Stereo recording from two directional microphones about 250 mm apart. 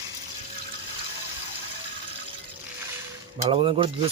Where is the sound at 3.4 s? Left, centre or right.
Right.